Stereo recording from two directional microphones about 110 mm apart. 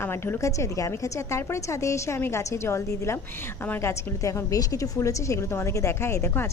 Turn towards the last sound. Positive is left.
turn(degrees=20)  # may be behind; listen again after turning